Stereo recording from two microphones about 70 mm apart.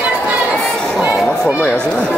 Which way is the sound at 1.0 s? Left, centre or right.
Right.